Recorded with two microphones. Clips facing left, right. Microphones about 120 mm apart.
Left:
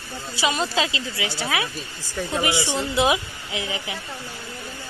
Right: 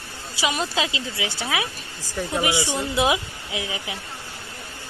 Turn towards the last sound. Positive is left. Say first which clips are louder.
# left 1 dB
turn(degrees=-15)  # may be behind; listen again after turning